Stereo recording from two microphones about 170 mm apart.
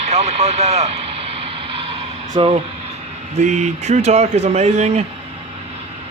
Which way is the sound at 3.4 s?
45° right (ahead or behind).